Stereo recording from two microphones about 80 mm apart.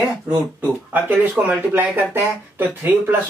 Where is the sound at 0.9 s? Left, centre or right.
Right.